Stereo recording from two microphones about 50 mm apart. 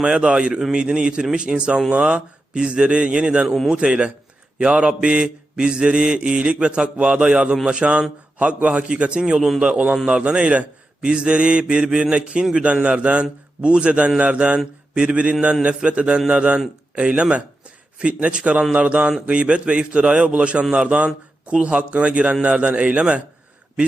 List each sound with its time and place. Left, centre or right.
0.0 s mantra: centre
0.7 s a man's voice: centre
1.9 s mantra: right
16.9 s a man's voice: right
18.7 s mantra: right